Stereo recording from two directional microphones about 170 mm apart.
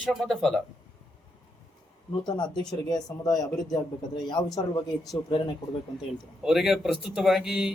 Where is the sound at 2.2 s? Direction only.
25° left (ahead or behind).